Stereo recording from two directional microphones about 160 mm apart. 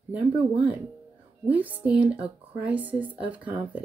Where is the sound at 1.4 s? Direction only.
10° right (ahead or behind).